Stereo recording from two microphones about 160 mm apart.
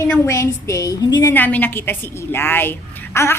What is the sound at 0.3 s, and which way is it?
A woman's voice, 20° left (ahead or behind).